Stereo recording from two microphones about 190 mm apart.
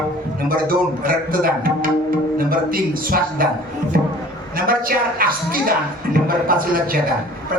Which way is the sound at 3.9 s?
50° right (ahead or behind).